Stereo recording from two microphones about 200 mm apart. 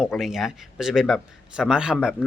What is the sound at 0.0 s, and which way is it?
A man's voice, centre (ahead or behind).